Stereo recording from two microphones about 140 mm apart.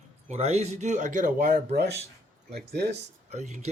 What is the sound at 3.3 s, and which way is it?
Speech, 55° right (ahead or behind).